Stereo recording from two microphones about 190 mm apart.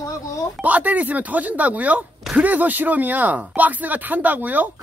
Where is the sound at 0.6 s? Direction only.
10° right (ahead or behind).